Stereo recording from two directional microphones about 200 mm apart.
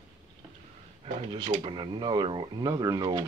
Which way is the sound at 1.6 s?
25° right (ahead or behind).